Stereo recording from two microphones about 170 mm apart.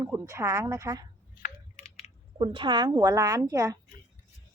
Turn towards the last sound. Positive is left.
turn(degrees=-20)  # may be behind; listen again after turning